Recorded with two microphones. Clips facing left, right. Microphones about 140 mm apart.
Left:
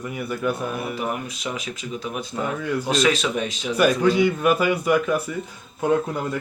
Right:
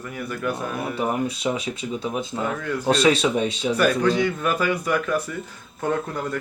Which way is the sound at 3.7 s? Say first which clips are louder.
Left 3 dB; 10° left (ahead or behind).